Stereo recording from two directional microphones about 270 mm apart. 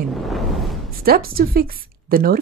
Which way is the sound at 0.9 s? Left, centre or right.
Right.